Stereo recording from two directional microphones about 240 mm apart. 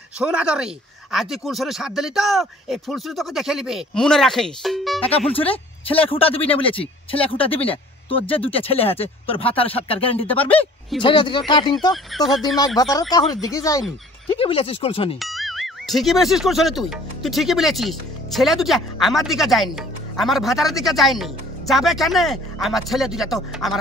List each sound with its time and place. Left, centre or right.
0.2 s speech: centre
5.3 s speech: left
10.3 s speech: centre
11.0 s speech: centre
11.9 s speech: centre
12.5 s speech: centre
15.1 s speech: centre